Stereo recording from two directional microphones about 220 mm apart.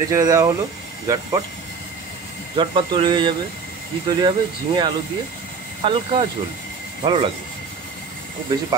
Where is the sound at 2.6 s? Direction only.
20° right (ahead or behind).